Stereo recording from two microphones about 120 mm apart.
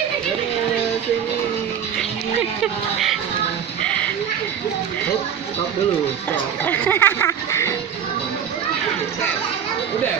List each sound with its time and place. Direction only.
2.6 s speech: centre (ahead or behind)
3.8 s a sound: 10° left (ahead or behind)
6.3 s speech: 15° left (ahead or behind)